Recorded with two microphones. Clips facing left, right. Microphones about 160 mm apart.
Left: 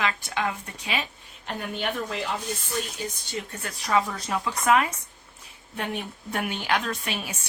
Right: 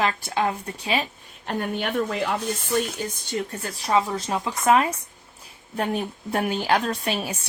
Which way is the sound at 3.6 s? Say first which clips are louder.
Right 1 dB; 30° right (ahead or behind).